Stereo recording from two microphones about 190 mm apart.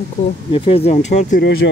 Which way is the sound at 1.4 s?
65° left (ahead or behind).